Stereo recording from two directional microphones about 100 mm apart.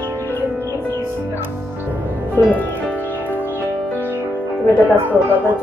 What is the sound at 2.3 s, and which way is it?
Music, 15° left (ahead or behind).